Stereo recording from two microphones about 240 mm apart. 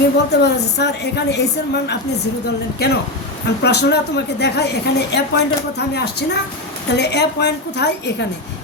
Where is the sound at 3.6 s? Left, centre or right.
Left.